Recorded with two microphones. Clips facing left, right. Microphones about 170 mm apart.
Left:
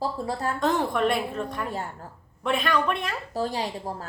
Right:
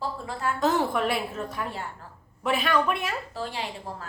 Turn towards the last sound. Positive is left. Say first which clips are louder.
# left 4 dB
turn(degrees=40)  # may be behind; listen again after turning